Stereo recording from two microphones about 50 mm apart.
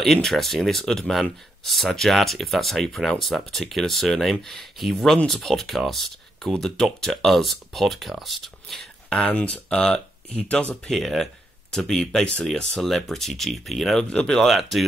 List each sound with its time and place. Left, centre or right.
0.0 s speech: centre
9.1 s speech: left
9.7 s speech: centre
10.9 s speech: centre
14.1 s speech: centre
14.6 s speech: centre